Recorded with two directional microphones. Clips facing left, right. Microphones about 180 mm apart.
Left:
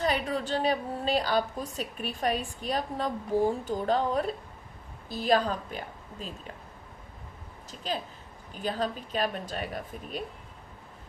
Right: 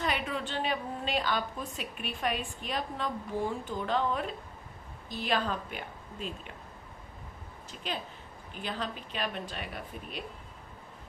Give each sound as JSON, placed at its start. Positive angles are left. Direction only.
{"t": 0.0, "sound": "a woman's voice", "side_deg": 40}
{"t": 7.9, "sound": "a woman's voice", "side_deg": 40}